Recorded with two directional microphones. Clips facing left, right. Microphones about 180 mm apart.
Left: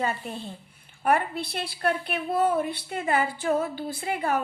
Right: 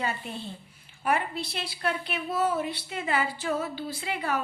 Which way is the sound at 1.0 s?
55° left (ahead or behind).